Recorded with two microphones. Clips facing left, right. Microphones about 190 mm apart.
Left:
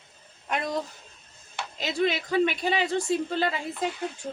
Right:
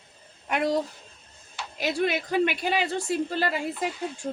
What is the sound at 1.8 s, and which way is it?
Speech, 10° right (ahead or behind).